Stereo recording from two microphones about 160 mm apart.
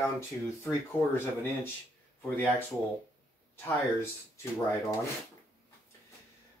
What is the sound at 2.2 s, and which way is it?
Speech, 10° left (ahead or behind).